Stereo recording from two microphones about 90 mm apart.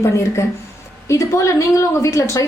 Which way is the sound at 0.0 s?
30° left (ahead or behind).